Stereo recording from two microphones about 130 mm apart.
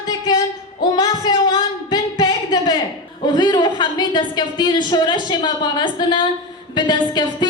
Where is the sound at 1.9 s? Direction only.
30° left (ahead or behind).